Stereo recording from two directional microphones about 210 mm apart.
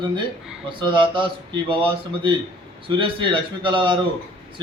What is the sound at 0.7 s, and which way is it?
A man's voice, 25° right (ahead or behind).